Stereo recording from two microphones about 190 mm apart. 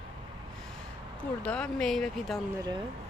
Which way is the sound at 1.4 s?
5° left (ahead or behind).